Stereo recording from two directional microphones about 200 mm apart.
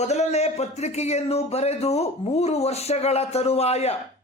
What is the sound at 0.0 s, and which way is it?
Speech, 35° left (ahead or behind).